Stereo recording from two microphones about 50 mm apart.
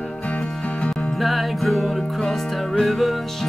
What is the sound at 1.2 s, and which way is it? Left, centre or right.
Music, centre.